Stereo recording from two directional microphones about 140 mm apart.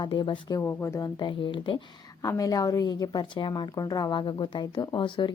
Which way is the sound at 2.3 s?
25° left (ahead or behind).